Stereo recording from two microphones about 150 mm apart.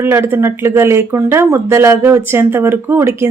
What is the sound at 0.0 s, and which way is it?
Speech, 15° right (ahead or behind).